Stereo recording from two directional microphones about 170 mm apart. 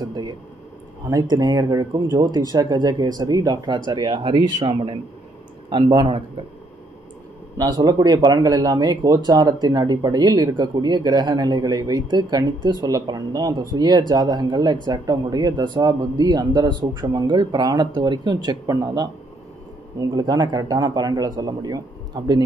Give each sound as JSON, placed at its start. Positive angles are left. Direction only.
{"t": 0.0, "sound": "a sound", "side_deg": -25}
{"t": 1.3, "sound": "speech", "side_deg": -25}
{"t": 7.5, "sound": "speech", "side_deg": -25}